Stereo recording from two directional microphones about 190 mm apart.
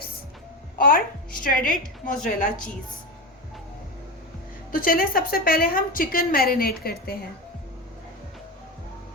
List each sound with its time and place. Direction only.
0.8 s a woman's voice: 50° left (ahead or behind)
4.7 s a woman's voice: 50° left (ahead or behind)